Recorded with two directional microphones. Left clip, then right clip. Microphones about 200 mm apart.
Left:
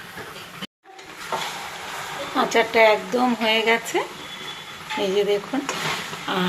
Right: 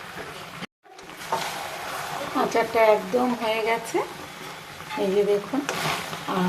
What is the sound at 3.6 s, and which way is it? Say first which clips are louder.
Speech: left 4 dB; centre (ahead or behind).